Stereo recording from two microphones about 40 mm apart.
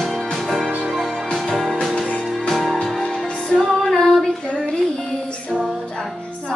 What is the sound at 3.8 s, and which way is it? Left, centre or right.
Female singing, centre.